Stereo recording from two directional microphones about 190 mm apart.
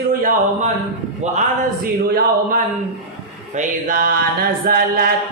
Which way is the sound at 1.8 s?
50° right (ahead or behind).